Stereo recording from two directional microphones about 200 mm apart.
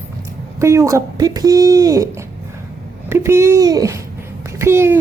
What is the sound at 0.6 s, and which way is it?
Speech, 15° right (ahead or behind).